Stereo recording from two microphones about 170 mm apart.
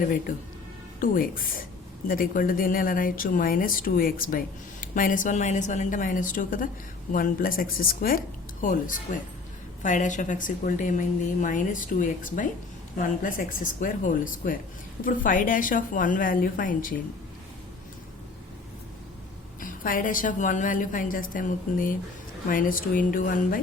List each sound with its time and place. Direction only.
1.0 s a woman's voice: 55° left (ahead or behind)
19.5 s a woman's voice: 55° left (ahead or behind)